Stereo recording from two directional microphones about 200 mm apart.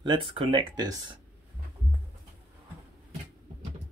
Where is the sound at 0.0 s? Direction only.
25° right (ahead or behind).